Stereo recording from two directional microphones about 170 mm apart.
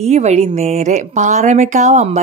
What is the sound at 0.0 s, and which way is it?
A woman's voice, 40° right (ahead or behind).